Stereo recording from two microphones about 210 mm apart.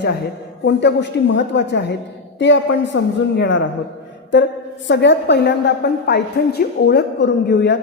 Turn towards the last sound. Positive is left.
turn(degrees=55)  # may be behind; listen again after turning